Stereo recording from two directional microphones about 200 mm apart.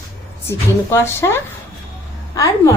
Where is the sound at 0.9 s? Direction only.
10° left (ahead or behind).